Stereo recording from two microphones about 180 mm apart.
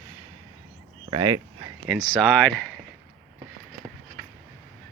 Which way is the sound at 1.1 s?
20° right (ahead or behind).